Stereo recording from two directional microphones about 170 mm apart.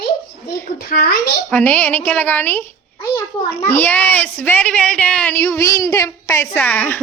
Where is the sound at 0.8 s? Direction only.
65° left (ahead or behind).